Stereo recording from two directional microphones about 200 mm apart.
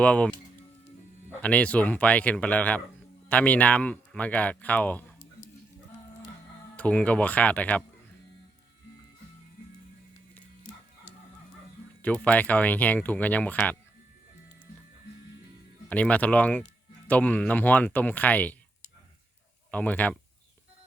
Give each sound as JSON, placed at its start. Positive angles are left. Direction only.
{"t": 0.0, "sound": "speech", "side_deg": 5}
{"t": 1.4, "sound": "speech", "side_deg": 5}
{"t": 6.7, "sound": "speech", "side_deg": 5}
{"t": 12.0, "sound": "speech", "side_deg": 5}
{"t": 15.9, "sound": "speech", "side_deg": 5}
{"t": 19.7, "sound": "speech", "side_deg": 5}